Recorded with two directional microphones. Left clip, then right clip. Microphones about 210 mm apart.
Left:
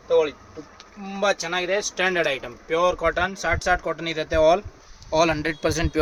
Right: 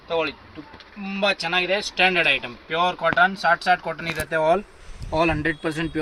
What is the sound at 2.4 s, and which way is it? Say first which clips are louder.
Speech: left 1 dB; 35° left (ahead or behind).